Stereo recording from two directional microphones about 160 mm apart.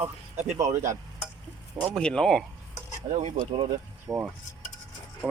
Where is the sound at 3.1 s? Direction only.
45° right (ahead or behind).